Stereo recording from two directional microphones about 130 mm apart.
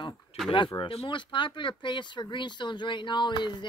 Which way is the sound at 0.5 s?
40° left (ahead or behind).